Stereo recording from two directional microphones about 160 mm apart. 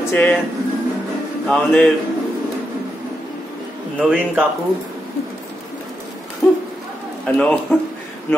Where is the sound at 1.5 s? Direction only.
5° left (ahead or behind).